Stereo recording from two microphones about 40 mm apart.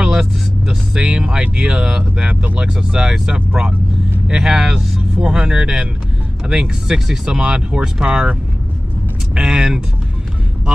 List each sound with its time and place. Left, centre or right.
0.0 s speech: centre